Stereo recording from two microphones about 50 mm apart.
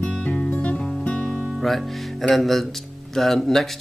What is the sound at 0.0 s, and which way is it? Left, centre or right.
Music, left.